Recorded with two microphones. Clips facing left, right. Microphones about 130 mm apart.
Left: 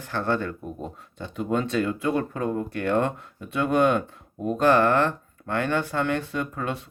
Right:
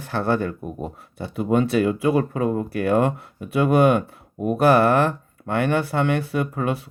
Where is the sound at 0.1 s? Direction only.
15° right (ahead or behind).